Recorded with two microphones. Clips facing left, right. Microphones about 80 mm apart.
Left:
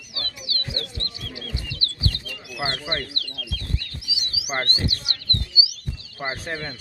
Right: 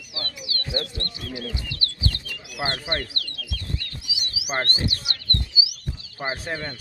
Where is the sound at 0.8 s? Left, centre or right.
Right.